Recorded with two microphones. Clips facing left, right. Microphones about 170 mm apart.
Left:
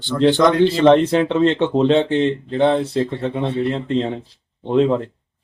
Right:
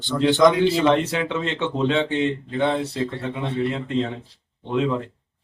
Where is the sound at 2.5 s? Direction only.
35° left (ahead or behind).